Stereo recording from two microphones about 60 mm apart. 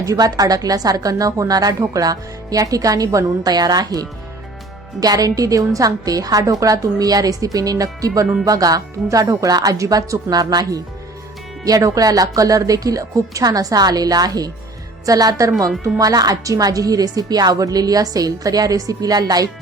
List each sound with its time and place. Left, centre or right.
0.0 s a woman's voice: right
8.4 s a woman's voice: right
11.6 s a woman's voice: right
16.0 s speech: right